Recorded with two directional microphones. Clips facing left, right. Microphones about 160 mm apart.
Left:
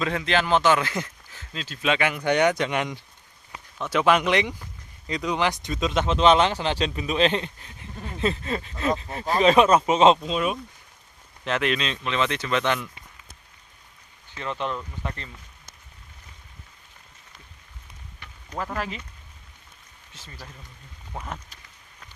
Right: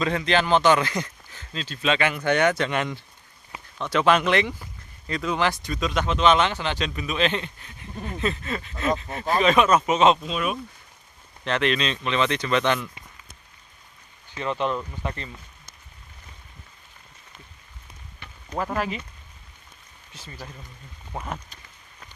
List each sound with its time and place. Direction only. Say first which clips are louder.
0.0 s speech: right 2 dB; 5° left (ahead or behind); by 10.6 s 30° left (ahead or behind)
11.4 s speech: right 1 dB; 5° left (ahead or behind)
14.3 s speech: right 4 dB; 15° right (ahead or behind)
18.2 s a sound: right 3 dB; 25° right (ahead or behind)
18.8 s speech: right 4 dB; 15° right (ahead or behind)
20.1 s speech: right 4 dB; 15° right (ahead or behind)